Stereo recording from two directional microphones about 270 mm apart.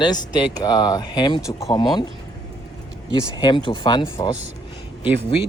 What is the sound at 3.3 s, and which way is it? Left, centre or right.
Speech, centre.